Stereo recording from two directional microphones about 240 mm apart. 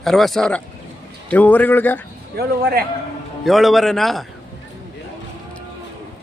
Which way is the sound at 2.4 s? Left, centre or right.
Right.